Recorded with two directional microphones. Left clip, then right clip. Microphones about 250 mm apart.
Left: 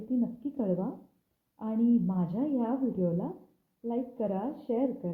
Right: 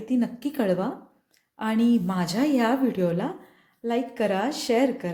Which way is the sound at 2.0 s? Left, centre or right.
Centre.